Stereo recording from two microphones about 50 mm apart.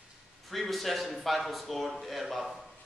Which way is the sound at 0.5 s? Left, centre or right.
Centre.